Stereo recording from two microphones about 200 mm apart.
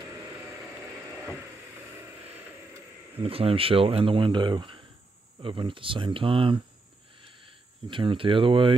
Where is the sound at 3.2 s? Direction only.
30° right (ahead or behind).